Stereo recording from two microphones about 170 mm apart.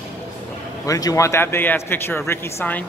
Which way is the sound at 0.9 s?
20° left (ahead or behind).